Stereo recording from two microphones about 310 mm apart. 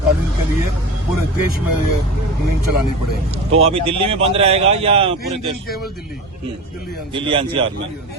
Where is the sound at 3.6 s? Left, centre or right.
Centre.